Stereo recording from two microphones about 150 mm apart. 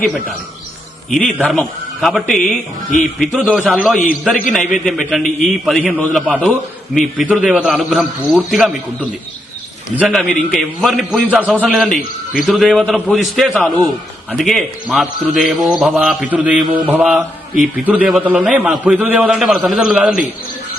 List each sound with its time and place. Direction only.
0.0 s a man's voice: centre (ahead or behind)
1.5 s a man's voice: centre (ahead or behind)
2.4 s speech: 60° left (ahead or behind)
3.2 s a man's voice: 5° right (ahead or behind)